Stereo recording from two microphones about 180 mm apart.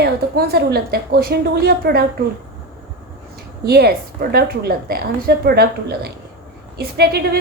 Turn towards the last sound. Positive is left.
turn(degrees=-65)  # may be behind; listen again after turning